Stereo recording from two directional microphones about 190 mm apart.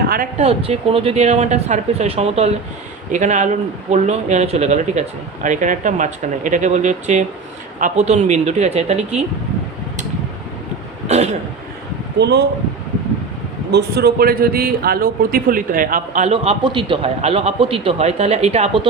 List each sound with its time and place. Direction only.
0.1 s speech: 50° right (ahead or behind)
0.4 s a man's voice: 30° right (ahead or behind)
11.1 s a man's voice: 35° right (ahead or behind)
12.2 s speech: 60° right (ahead or behind)
13.7 s a man's voice: 60° right (ahead or behind); by 18.9 s 30° right (ahead or behind)